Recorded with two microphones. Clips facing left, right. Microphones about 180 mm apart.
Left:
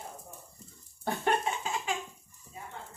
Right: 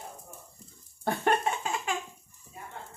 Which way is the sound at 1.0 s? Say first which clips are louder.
Right 2 dB; 55° right (ahead or behind).